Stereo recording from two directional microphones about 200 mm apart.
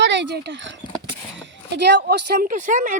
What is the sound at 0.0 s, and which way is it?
Speech, 60° right (ahead or behind).